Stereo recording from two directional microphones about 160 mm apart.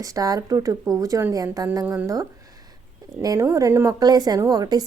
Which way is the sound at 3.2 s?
25° right (ahead or behind).